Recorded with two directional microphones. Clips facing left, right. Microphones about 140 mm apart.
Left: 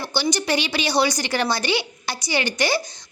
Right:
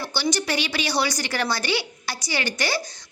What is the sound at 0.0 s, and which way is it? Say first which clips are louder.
A woman's voice: left 2 dB; 15° left (ahead or behind).